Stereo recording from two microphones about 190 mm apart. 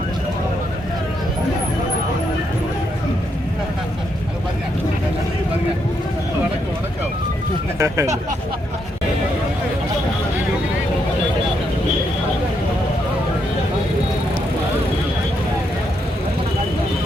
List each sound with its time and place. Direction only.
7.8 s speech: 15° right (ahead or behind)